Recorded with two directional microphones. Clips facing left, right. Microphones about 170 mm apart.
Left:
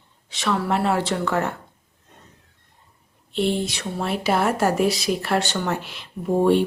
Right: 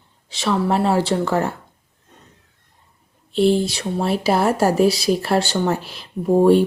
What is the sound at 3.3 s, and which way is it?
Speech, 35° right (ahead or behind).